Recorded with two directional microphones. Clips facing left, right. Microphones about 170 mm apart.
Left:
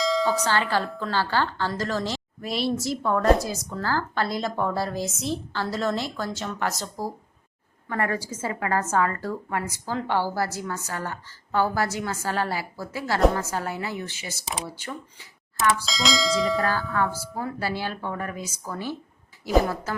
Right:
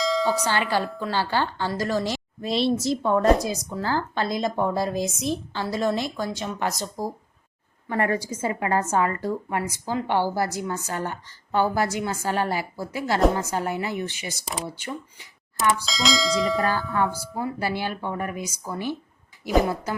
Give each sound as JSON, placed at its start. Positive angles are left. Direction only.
{"t": 0.0, "sound": "bell", "side_deg": 0}
{"t": 0.4, "sound": "a woman's voice", "side_deg": -15}
{"t": 15.8, "sound": "speech", "side_deg": 0}
{"t": 17.2, "sound": "a woman's voice", "side_deg": -10}